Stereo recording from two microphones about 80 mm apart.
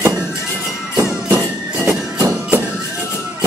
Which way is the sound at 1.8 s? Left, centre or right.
Right.